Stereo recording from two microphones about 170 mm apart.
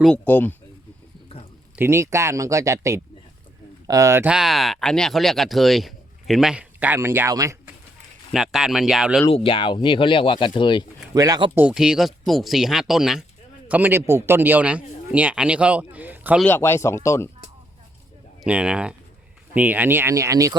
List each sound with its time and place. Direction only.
0.0 s speech: 10° left (ahead or behind)
1.7 s speech: 15° right (ahead or behind)
8.3 s speech: centre (ahead or behind)
9.3 s speech: 30° left (ahead or behind)
11.1 s speech: 20° right (ahead or behind)
11.5 s speech: 5° right (ahead or behind)
16.4 s speech: 10° left (ahead or behind)
18.4 s speech: 5° right (ahead or behind)